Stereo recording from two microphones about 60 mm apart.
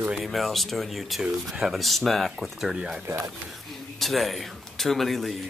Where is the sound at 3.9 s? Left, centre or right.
Centre.